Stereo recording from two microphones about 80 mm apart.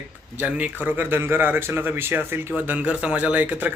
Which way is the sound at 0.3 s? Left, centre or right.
Centre.